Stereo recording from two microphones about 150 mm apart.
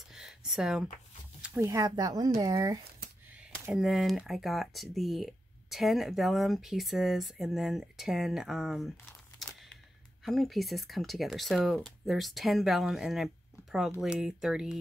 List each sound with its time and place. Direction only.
0.1 s a sound: 5° right (ahead or behind)
1.6 s speech: 20° right (ahead or behind)
3.3 s speech: 5° right (ahead or behind)
10.2 s speech: centre (ahead or behind)